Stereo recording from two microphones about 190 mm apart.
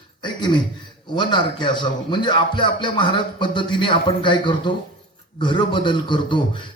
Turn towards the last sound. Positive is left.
turn(degrees=25)  # may be behind; listen again after turning